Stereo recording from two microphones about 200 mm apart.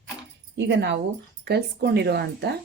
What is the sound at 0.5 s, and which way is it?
Speech, 60° right (ahead or behind).